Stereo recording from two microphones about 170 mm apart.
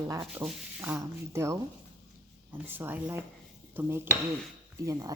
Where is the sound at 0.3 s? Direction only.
10° right (ahead or behind).